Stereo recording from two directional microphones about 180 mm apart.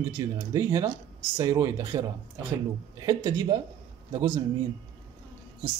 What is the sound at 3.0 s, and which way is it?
Speech, 20° right (ahead or behind).